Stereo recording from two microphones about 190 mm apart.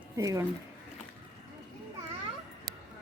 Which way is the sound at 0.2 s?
20° right (ahead or behind).